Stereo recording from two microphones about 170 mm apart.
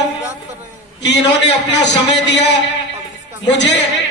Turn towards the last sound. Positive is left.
turn(degrees=90)